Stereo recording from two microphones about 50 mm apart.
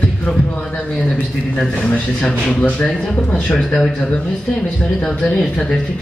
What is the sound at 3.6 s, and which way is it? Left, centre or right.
Speech, centre.